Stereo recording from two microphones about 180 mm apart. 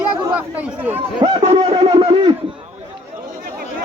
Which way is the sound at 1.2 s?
35° right (ahead or behind).